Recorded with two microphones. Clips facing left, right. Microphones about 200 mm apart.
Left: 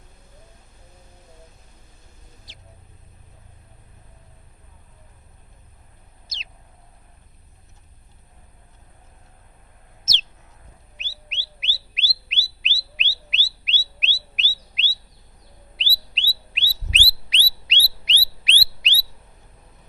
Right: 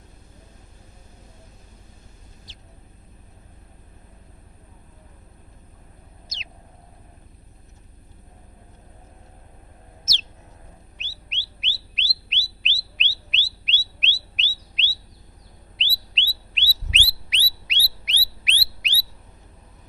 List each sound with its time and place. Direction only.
10.9 s bird: centre (ahead or behind)
16.9 s bird: 30° left (ahead or behind)